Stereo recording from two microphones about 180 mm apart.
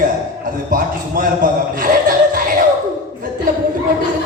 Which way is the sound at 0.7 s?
50° right (ahead or behind).